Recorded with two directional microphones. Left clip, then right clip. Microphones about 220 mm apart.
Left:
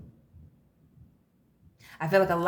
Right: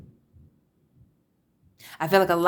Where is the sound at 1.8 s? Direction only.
45° right (ahead or behind).